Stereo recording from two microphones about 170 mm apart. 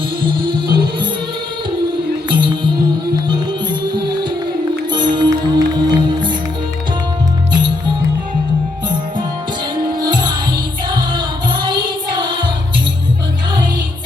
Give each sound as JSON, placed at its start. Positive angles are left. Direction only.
{"t": 0.2, "sound": "music", "side_deg": -30}
{"t": 2.3, "sound": "music", "side_deg": -30}
{"t": 4.9, "sound": "music", "side_deg": -25}
{"t": 10.0, "sound": "music", "side_deg": -25}